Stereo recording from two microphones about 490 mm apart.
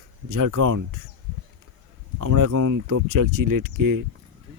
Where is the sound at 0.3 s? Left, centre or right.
Right.